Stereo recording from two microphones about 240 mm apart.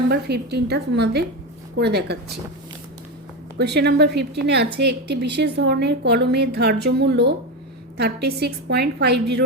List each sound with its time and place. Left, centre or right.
0.1 s a woman's voice: right
3.6 s a woman's voice: right